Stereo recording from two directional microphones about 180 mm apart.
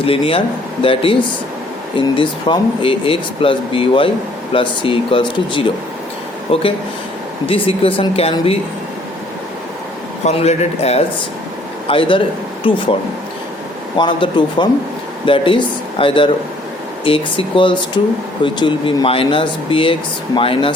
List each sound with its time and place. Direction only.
0.0 s speech: 30° left (ahead or behind)
10.2 s speech: 35° left (ahead or behind)
13.9 s speech: 25° left (ahead or behind)